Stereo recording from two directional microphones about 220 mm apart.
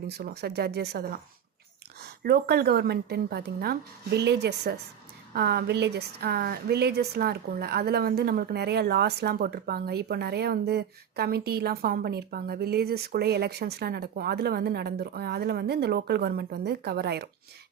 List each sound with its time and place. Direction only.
0.1 s speech: 45° right (ahead or behind)